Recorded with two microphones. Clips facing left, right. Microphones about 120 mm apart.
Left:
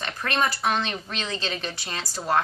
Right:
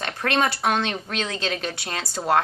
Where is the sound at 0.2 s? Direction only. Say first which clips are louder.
Right 3 dB; 65° right (ahead or behind).